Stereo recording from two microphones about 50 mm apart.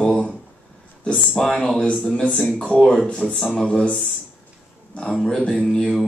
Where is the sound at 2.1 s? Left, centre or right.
Left.